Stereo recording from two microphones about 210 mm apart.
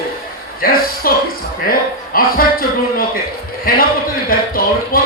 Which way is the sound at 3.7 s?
45° left (ahead or behind).